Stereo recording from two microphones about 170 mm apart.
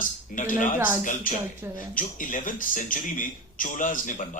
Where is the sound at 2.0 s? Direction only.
50° left (ahead or behind).